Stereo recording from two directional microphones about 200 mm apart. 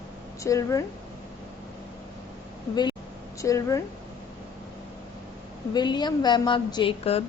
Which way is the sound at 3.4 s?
15° left (ahead or behind).